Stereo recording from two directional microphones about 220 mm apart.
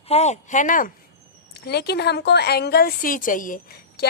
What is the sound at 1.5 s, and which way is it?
A woman's voice, 50° left (ahead or behind).